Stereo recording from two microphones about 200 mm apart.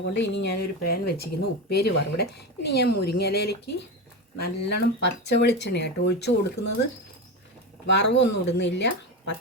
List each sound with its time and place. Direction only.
0.1 s speech: 60° left (ahead or behind)
7.9 s speech: 60° left (ahead or behind)